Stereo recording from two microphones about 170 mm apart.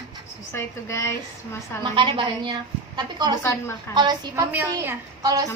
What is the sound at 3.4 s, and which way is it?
Speech, 15° left (ahead or behind).